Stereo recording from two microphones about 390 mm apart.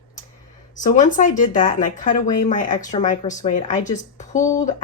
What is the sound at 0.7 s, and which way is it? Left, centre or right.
A woman's voice, centre.